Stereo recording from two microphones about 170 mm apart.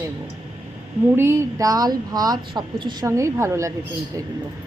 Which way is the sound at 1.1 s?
15° right (ahead or behind).